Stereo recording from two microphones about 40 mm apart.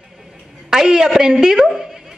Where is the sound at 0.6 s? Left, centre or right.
Centre.